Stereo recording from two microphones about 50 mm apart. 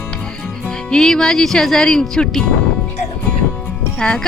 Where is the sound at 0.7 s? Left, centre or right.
Centre.